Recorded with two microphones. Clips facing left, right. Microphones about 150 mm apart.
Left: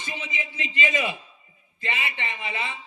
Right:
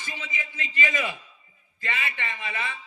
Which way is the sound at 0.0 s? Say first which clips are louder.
Left 3 dB; 20° left (ahead or behind).